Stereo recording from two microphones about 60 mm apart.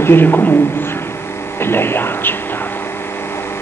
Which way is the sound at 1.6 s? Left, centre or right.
Left.